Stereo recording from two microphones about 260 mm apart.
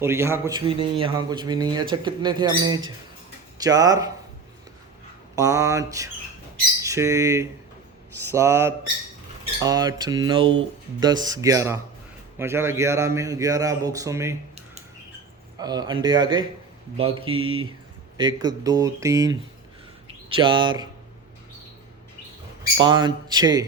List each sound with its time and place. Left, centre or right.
0.0 s speech: centre
5.4 s speech: centre
15.5 s speech: centre
17.0 s mantra: centre
18.2 s speech: centre
22.8 s speech: centre